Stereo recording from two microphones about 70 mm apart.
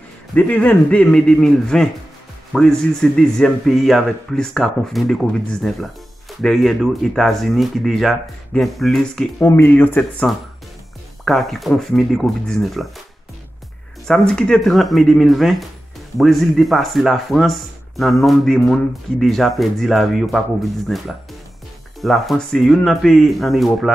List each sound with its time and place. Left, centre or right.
0.4 s speech: left; by 9.2 s centre
9.4 s speech: left
11.2 s speech: centre
14.0 s speech: centre
22.0 s speech: centre